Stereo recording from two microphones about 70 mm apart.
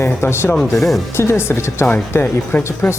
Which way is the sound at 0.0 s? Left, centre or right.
Left.